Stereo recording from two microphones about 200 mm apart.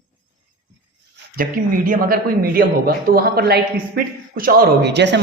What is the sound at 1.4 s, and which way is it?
A man's voice, 45° right (ahead or behind).